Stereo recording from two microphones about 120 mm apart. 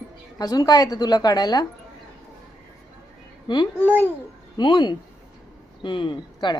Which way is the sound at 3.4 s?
40° left (ahead or behind).